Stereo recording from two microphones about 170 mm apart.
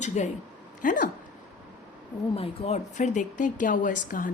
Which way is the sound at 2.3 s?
35° left (ahead or behind).